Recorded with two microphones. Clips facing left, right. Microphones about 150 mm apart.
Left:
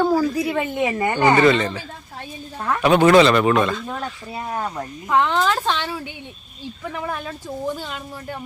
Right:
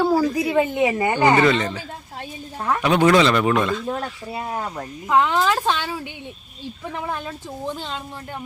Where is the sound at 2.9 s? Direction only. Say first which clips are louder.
Left 3 dB; 50° left (ahead or behind).